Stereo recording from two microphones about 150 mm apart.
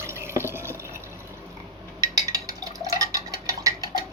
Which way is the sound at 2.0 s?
25° right (ahead or behind).